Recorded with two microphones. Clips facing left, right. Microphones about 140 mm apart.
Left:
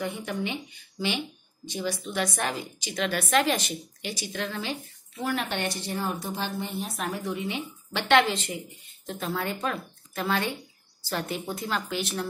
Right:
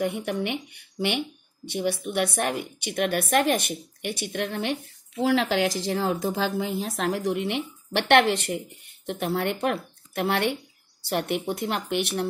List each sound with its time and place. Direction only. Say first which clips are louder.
0.0 s a woman's voice: right 4 dB; 65° right (ahead or behind)
5.2 s a woman's voice: right 7 dB; 90° right; by 12.3 s 65° right (ahead or behind)